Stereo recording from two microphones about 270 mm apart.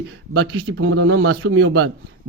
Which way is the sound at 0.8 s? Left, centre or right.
Right.